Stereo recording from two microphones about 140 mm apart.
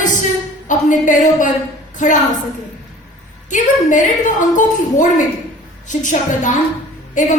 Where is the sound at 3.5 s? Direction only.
65° left (ahead or behind).